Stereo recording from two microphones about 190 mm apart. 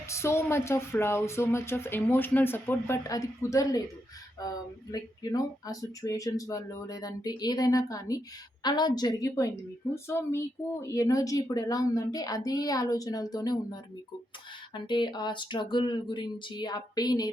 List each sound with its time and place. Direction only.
0.1 s speech: 15° left (ahead or behind)